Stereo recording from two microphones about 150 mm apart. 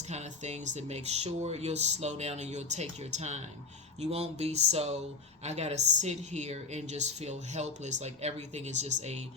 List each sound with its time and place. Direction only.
0.1 s a woman's voice: 50° right (ahead or behind)